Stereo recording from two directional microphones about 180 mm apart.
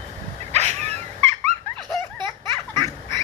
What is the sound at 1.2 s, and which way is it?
Dog, 35° right (ahead or behind).